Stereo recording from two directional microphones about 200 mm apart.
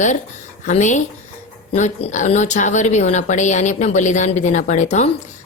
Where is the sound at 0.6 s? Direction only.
35° left (ahead or behind).